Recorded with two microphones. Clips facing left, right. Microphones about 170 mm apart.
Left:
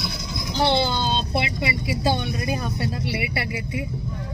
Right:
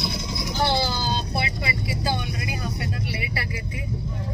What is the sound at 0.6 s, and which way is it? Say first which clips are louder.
Vehicle: left 3 dB; 20° left (ahead or behind).